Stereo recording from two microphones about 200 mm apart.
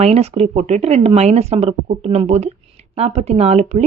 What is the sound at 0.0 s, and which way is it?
Speech, 30° right (ahead or behind).